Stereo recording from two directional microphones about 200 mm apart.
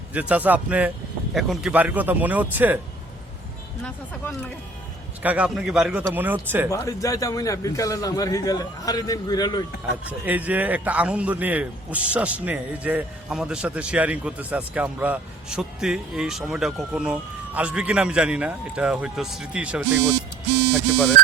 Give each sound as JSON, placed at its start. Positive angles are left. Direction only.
{"t": 0.1, "sound": "a man's voice", "side_deg": -5}
{"t": 5.2, "sound": "a man's voice", "side_deg": -5}
{"t": 6.7, "sound": "a man's voice", "side_deg": 15}
{"t": 10.1, "sound": "a man's voice", "side_deg": -10}